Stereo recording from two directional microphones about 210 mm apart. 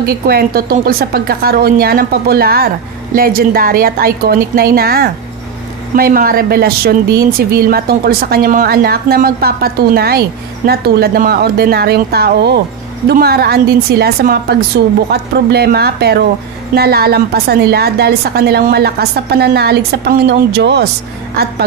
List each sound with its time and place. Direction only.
0.0 s a woman's voice: 45° right (ahead or behind)